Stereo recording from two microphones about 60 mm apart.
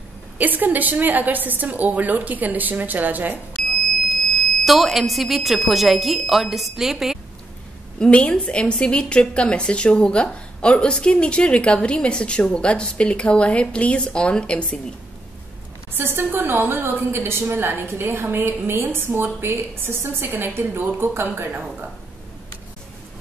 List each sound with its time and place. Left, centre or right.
0.4 s a woman's voice: right
3.6 s a sound: centre
4.1 s speech: centre
8.0 s a woman's voice: centre
15.9 s a woman's voice: right